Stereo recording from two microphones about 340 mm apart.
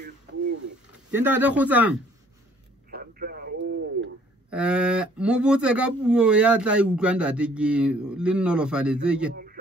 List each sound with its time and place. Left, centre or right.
1.1 s speech: centre
2.9 s radio: right
4.5 s speech: centre
9.3 s a sound: right